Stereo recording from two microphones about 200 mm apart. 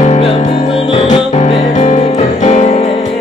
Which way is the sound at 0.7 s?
25° left (ahead or behind).